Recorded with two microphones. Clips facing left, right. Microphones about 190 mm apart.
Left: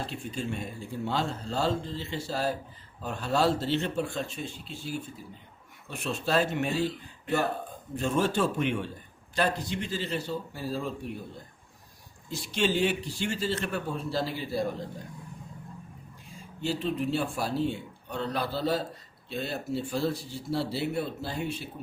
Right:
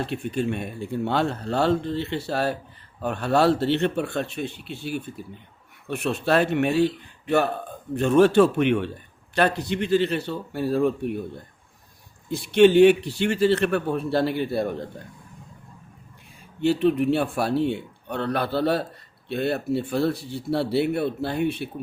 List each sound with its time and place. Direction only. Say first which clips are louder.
0.0 s a man's voice: right 8 dB; 65° right (ahead or behind)
12.3 s a man's voice: right 12 dB; 60° right (ahead or behind)
16.6 s a man's voice: right 10 dB; 65° right (ahead or behind)